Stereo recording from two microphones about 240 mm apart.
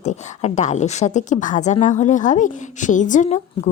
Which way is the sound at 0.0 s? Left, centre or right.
Left.